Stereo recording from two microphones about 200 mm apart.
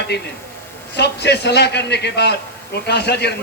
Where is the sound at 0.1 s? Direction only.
55° left (ahead or behind).